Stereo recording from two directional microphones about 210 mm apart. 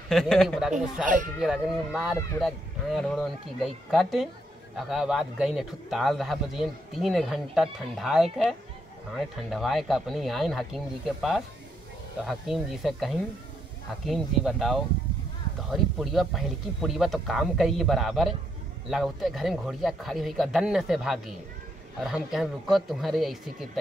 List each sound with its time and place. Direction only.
0.1 s a man's voice: centre (ahead or behind)
1.0 s speech: 40° right (ahead or behind)
1.4 s a man's voice: centre (ahead or behind)